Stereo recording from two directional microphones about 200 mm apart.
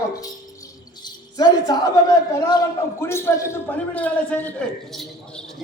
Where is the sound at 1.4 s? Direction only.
20° left (ahead or behind).